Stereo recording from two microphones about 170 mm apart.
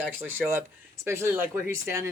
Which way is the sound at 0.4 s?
5° right (ahead or behind).